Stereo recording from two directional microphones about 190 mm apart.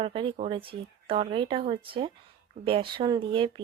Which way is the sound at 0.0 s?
25° right (ahead or behind).